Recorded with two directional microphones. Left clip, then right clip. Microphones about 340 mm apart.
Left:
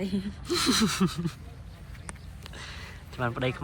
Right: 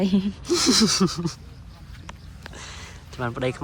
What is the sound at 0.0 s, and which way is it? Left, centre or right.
Speech, right.